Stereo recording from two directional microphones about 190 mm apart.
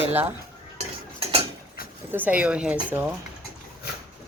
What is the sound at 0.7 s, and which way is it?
Stir, 30° right (ahead or behind).